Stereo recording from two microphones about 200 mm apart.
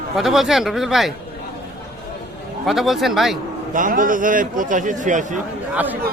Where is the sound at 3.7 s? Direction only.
40° right (ahead or behind).